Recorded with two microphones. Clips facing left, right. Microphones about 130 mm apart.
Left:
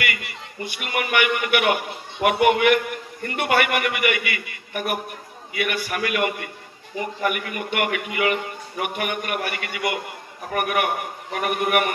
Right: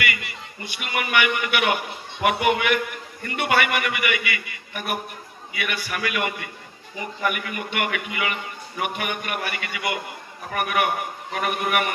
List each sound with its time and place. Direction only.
0.0 s a man's voice: 50° left (ahead or behind)